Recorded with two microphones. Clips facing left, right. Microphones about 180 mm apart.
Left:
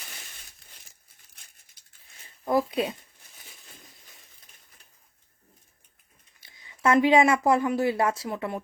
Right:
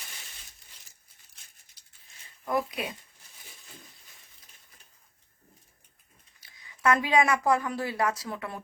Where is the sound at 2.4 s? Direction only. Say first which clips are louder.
Left 5 dB; 30° left (ahead or behind).